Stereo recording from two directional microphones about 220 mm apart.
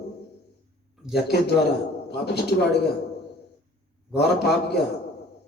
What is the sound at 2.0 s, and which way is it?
Speech, 50° left (ahead or behind).